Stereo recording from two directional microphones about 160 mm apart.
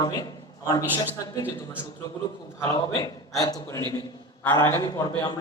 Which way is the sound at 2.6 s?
20° left (ahead or behind).